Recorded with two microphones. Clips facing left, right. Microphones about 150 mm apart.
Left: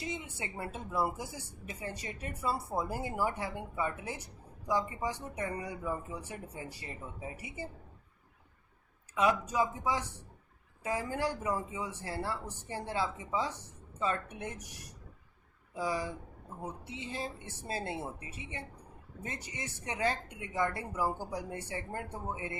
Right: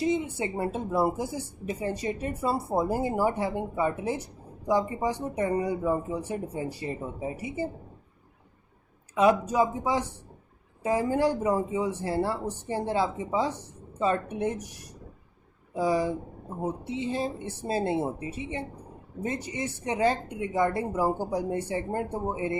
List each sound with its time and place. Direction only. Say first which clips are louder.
0.0 s speech: right 13 dB; 30° right (ahead or behind)
9.1 s a woman's voice: right 7 dB; 30° right (ahead or behind)
15.7 s a woman's voice: right 9 dB; 30° right (ahead or behind)